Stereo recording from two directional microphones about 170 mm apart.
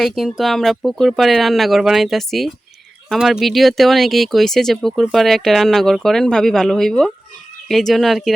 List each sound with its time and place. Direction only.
0.0 s speech: centre (ahead or behind)